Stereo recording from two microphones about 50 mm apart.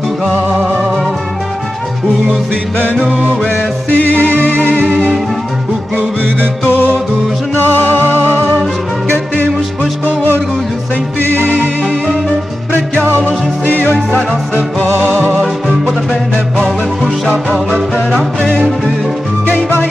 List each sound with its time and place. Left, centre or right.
3.4 s music: left
13.2 s music: left
16.5 s music: centre
17.5 s music: centre